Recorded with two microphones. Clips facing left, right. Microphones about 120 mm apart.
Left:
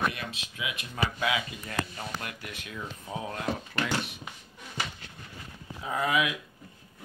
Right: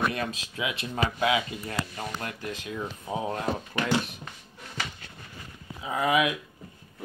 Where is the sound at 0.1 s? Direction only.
40° right (ahead or behind).